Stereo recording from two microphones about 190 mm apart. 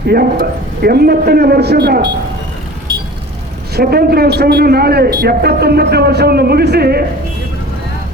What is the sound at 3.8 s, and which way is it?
A man's voice, 55° right (ahead or behind).